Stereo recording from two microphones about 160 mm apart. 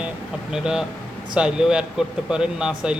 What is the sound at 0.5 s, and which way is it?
Speech, 5° right (ahead or behind).